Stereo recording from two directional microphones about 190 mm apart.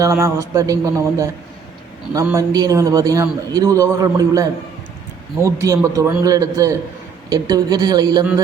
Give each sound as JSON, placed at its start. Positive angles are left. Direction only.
{"t": 0.0, "sound": "a man's voice", "side_deg": -15}